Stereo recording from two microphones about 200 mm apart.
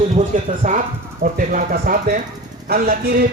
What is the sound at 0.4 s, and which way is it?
Speech, 40° right (ahead or behind).